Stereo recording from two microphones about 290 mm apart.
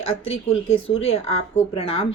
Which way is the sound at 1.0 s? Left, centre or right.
Centre.